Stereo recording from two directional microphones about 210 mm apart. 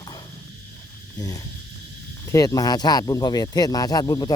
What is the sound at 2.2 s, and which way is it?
Speech, 15° left (ahead or behind).